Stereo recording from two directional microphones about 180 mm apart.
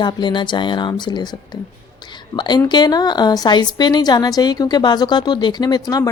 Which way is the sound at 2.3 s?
25° left (ahead or behind).